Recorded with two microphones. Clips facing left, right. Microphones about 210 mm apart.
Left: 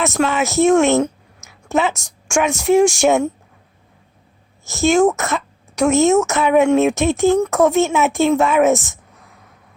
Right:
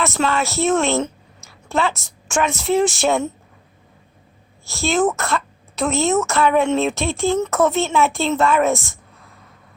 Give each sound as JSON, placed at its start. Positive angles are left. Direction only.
{"t": 0.1, "sound": "a woman's voice", "side_deg": 10}
{"t": 4.6, "sound": "speech", "side_deg": 15}